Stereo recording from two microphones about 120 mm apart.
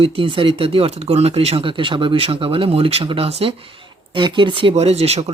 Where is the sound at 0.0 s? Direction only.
50° right (ahead or behind).